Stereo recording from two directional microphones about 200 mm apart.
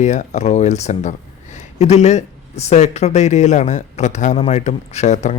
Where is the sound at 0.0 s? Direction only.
35° left (ahead or behind).